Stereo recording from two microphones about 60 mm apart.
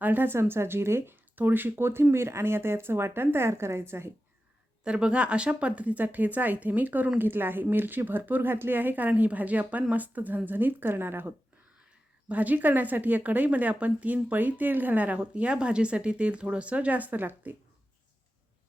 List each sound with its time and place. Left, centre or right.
0.0 s speech: right
1.4 s speech: right
4.8 s a woman's voice: centre; by 11.3 s right
12.3 s a woman's voice: right